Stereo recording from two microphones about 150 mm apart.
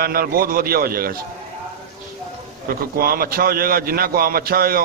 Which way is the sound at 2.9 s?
80° right.